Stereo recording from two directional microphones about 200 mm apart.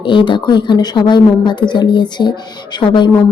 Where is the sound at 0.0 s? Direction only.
25° left (ahead or behind).